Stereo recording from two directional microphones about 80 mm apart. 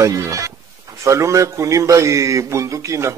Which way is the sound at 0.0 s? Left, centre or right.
Right.